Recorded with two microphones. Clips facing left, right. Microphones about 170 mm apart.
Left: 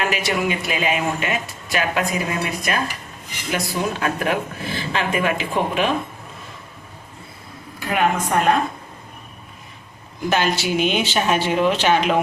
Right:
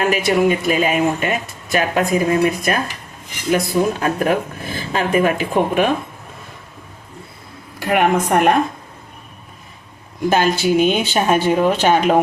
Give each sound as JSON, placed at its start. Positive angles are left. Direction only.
{"t": 0.0, "sound": "speech", "side_deg": -50}
{"t": 7.8, "sound": "a woman's voice", "side_deg": -65}
{"t": 10.2, "sound": "speech", "side_deg": -45}